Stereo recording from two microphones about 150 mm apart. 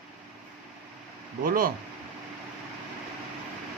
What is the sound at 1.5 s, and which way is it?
Speech, 70° right (ahead or behind).